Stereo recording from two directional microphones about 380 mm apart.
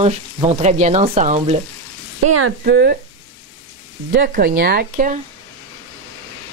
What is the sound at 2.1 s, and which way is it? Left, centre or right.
Speech, right.